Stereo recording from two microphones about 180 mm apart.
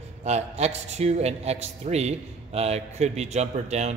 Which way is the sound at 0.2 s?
35° right (ahead or behind).